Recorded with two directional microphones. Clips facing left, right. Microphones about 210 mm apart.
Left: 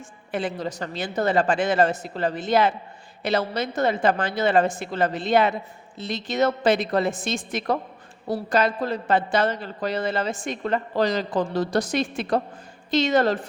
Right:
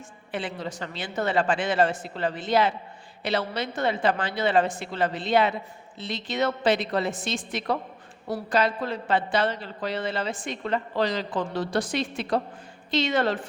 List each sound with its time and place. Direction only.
0.3 s a woman's voice: 45° left (ahead or behind)